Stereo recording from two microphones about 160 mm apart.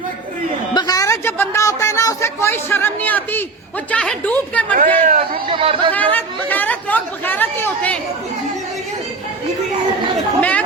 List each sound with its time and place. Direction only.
0.7 s a sound: 25° left (ahead or behind)
3.9 s a woman's voice: 5° left (ahead or behind)
4.8 s speech: 60° right (ahead or behind)
5.5 s speech: 35° right (ahead or behind)
5.9 s speech: 10° left (ahead or behind)